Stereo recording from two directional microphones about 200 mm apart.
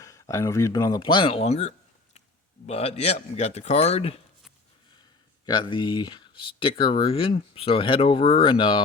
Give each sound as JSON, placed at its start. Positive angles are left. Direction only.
{"t": 0.0, "sound": "speech", "side_deg": 15}
{"t": 5.5, "sound": "speech", "side_deg": 25}